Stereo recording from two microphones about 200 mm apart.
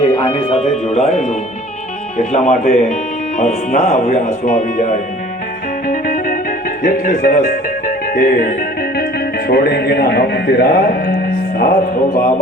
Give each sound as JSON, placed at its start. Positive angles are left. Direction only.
{"t": 0.0, "sound": "speech", "side_deg": 25}
{"t": 5.9, "sound": "music", "side_deg": 45}
{"t": 6.8, "sound": "speech", "side_deg": 40}